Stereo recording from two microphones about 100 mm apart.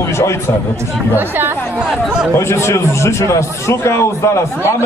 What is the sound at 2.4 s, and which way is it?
A man's voice, 25° left (ahead or behind).